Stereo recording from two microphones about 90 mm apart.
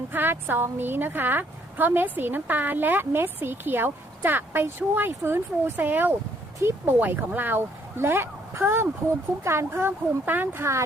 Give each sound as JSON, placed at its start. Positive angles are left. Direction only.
{"t": 0.1, "sound": "a woman's voice", "side_deg": -20}
{"t": 7.0, "sound": "a woman's voice", "side_deg": -20}